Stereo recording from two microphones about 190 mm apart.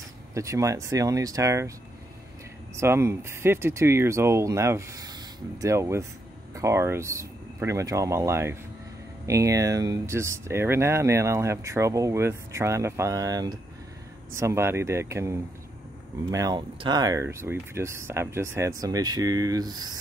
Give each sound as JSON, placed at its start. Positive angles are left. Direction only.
{"t": 0.3, "sound": "speech", "side_deg": -15}
{"t": 2.7, "sound": "speech", "side_deg": -15}